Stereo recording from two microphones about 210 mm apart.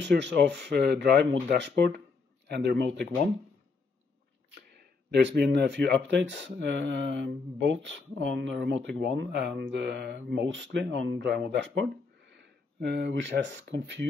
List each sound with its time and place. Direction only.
0.0 s a man's voice: 55° right (ahead or behind)
4.7 s speech: 55° right (ahead or behind)
12.8 s speech: 55° right (ahead or behind)